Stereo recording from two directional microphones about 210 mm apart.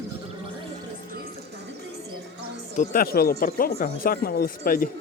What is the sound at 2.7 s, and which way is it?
Speech, 40° left (ahead or behind).